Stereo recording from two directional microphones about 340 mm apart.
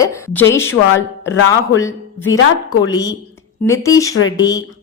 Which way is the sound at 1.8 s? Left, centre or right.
Centre.